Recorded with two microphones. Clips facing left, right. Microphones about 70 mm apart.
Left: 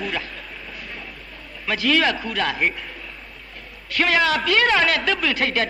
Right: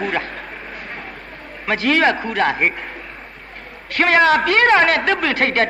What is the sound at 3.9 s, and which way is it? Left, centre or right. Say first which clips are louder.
A man's voice: right 6 dB; right.